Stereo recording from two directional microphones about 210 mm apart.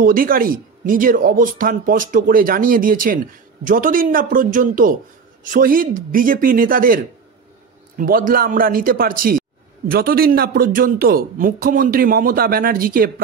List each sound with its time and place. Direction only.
0.0 s speech: 40° right (ahead or behind)
8.0 s a man's voice: 40° right (ahead or behind)